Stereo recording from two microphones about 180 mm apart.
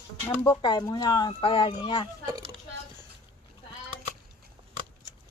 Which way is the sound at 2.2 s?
25° right (ahead or behind).